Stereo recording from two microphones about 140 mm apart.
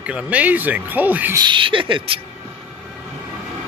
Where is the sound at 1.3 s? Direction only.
35° right (ahead or behind).